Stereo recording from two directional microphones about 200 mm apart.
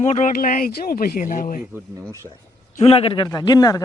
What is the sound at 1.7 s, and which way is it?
Speech, 15° right (ahead or behind).